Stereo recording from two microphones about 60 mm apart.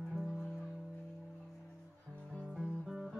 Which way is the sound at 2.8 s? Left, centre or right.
Centre.